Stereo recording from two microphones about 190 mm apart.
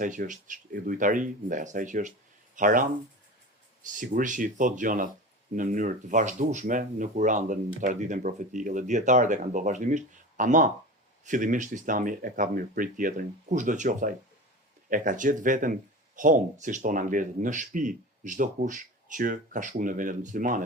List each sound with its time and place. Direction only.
0.0 s speech: 40° right (ahead or behind)
3.9 s speech: 45° right (ahead or behind)